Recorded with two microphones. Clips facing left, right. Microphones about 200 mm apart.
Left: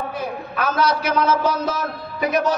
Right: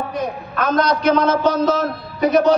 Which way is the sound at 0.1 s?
5° left (ahead or behind).